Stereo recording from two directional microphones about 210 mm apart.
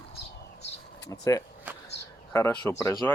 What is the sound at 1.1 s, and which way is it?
Speech, 15° left (ahead or behind).